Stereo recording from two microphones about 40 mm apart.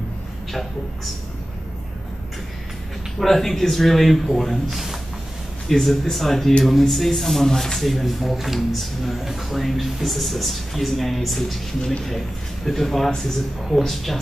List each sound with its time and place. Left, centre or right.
3.2 s speech: centre
5.7 s speech: centre
12.6 s speech: centre